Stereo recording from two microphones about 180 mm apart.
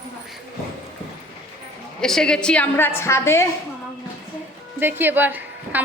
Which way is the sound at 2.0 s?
5° left (ahead or behind).